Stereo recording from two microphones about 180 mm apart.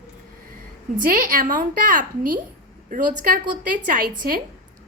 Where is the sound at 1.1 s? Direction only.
50° right (ahead or behind).